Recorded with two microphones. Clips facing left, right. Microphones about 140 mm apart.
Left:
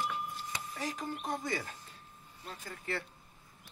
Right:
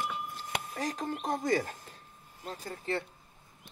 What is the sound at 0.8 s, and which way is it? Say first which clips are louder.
Speech: right 3 dB; 45° right (ahead or behind).